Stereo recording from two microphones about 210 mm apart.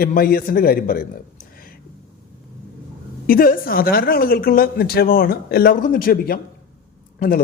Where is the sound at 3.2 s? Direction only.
40° left (ahead or behind).